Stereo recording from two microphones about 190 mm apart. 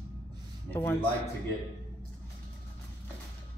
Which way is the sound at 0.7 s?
10° left (ahead or behind).